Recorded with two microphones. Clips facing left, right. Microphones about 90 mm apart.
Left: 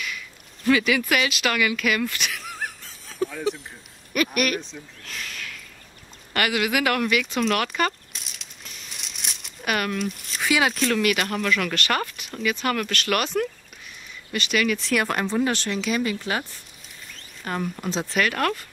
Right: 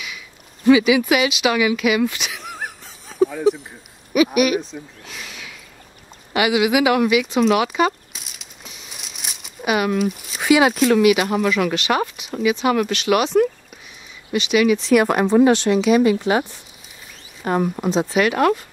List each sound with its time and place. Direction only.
0.7 s speech: 5° right (ahead or behind)
5.0 s a sound: 5° right (ahead or behind)
10.4 s speech: 10° right (ahead or behind)